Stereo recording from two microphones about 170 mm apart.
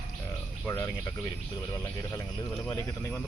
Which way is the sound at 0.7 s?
15° left (ahead or behind).